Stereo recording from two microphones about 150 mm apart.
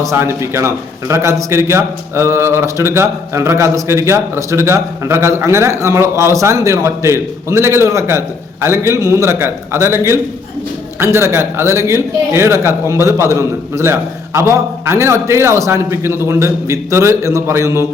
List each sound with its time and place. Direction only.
0.0 s a man's voice: 20° right (ahead or behind)